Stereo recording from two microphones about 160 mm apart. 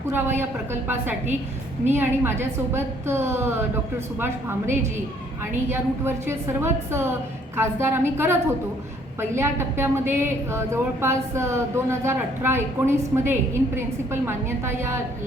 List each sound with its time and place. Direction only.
0.1 s speech: 15° right (ahead or behind)